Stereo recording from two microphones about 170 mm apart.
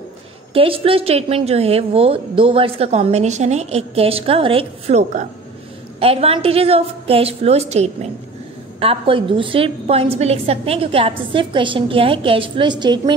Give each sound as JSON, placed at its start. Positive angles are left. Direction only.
{"t": 0.5, "sound": "a woman's voice", "side_deg": -35}